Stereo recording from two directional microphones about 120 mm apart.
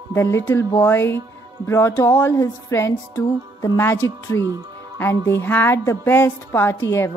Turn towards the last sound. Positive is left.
turn(degrees=20)  # may be behind; listen again after turning